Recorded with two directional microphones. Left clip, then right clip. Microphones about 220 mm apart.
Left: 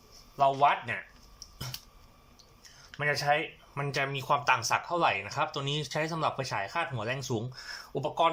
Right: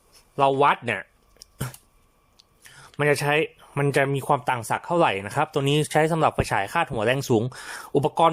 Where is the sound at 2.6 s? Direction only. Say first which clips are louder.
Right 8 dB; 50° right (ahead or behind).